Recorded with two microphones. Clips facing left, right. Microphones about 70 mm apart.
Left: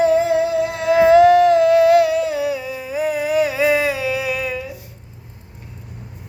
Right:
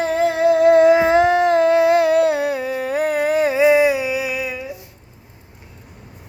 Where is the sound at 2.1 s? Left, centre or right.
Right.